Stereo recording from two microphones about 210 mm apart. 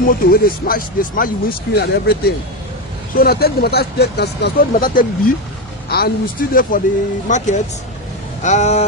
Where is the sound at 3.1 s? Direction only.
45° left (ahead or behind).